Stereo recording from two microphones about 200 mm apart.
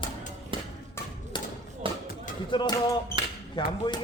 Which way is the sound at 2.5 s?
25° left (ahead or behind).